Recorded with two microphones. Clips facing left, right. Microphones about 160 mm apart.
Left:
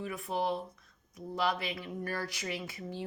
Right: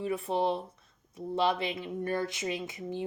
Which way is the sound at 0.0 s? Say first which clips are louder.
Right 5 dB; 30° right (ahead or behind).